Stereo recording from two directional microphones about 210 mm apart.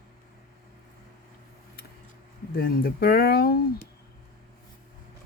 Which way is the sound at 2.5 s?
45° left (ahead or behind).